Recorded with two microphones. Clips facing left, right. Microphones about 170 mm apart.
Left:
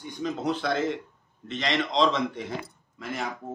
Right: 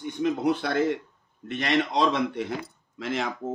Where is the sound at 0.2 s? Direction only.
60° right (ahead or behind).